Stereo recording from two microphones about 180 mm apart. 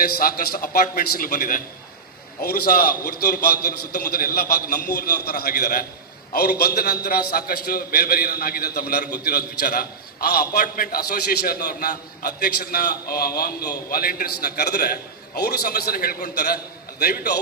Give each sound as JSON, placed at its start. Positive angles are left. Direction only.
{"t": 0.0, "sound": "a man's voice", "side_deg": 55}